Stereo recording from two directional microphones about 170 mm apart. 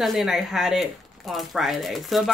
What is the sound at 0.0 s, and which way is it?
Speech, centre (ahead or behind).